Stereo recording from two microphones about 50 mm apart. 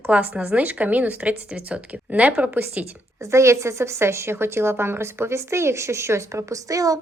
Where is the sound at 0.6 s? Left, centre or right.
Right.